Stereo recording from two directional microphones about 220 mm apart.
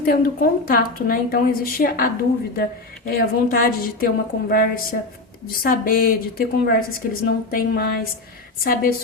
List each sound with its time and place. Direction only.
0.0 s a woman's voice: 45° left (ahead or behind)
3.1 s a woman's voice: 45° left (ahead or behind)